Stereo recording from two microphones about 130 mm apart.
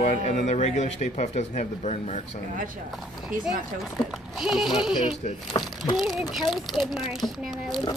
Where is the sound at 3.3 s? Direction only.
90° right.